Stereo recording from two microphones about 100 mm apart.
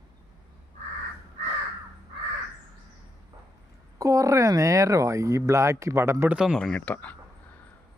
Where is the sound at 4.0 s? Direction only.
35° right (ahead or behind).